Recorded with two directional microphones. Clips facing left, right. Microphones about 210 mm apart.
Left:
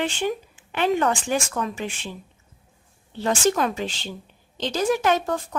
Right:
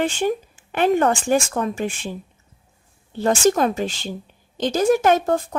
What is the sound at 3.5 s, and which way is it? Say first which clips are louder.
Speech: right 4 dB; 40° right (ahead or behind).